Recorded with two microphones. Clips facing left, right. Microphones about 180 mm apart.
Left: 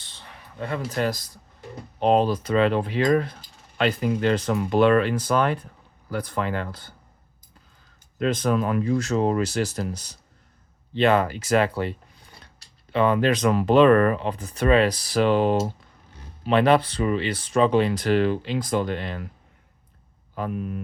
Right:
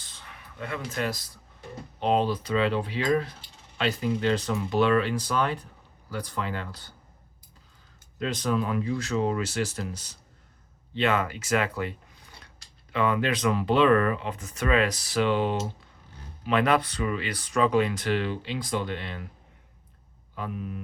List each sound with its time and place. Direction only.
0.0 s a sound: 30° left (ahead or behind)
2.0 s speech: 45° left (ahead or behind)
8.2 s speech: 50° left (ahead or behind)
16.4 s speech: 30° left (ahead or behind)
20.3 s speech: 50° left (ahead or behind)